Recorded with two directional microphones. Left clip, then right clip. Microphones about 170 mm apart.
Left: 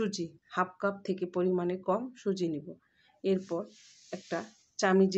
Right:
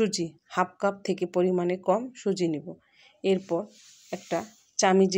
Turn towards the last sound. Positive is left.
turn(degrees=-25)  # may be behind; listen again after turning